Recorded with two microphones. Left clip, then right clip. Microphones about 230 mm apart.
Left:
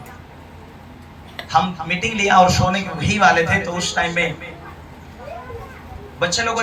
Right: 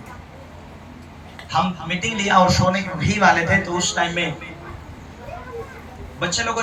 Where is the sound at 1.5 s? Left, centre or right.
Centre.